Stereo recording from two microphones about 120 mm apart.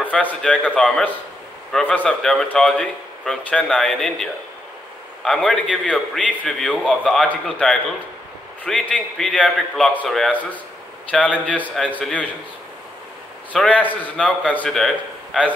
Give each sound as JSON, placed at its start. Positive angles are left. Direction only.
{"t": 0.0, "sound": "a man's voice", "side_deg": 15}
{"t": 10.3, "sound": "a man's voice", "side_deg": 15}
{"t": 13.5, "sound": "a man's voice", "side_deg": 10}